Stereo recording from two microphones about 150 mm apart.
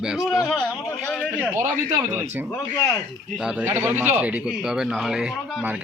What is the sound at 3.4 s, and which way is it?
Speech, 10° right (ahead or behind).